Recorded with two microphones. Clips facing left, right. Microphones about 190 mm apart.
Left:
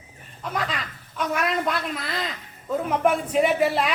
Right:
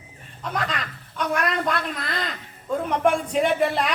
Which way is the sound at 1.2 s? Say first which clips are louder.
Even; 5° left (ahead or behind).